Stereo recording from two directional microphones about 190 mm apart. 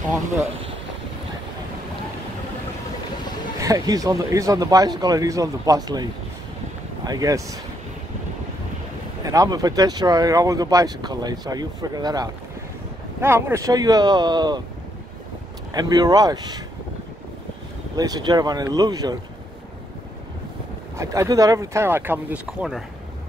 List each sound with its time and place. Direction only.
3.5 s speech: 20° right (ahead or behind)
7.1 s speech: 20° right (ahead or behind)
9.2 s speech: 20° right (ahead or behind)
15.7 s speech: 20° right (ahead or behind)
17.9 s speech: 20° right (ahead or behind)
21.0 s speech: 15° right (ahead or behind)